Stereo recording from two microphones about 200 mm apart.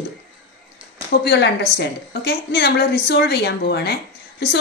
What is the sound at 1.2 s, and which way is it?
A woman's voice, 55° left (ahead or behind).